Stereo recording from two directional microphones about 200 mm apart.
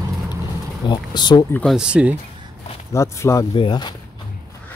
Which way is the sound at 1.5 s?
5° left (ahead or behind).